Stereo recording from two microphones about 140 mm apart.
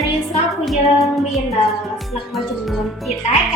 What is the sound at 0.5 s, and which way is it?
Child singing, centre (ahead or behind).